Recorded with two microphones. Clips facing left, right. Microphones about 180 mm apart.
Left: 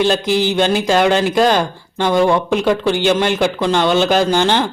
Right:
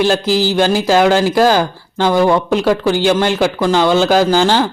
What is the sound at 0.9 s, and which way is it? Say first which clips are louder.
Speech: right 2 dB; 5° right (ahead or behind).